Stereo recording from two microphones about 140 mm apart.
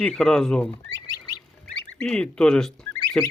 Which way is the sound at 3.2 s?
10° left (ahead or behind).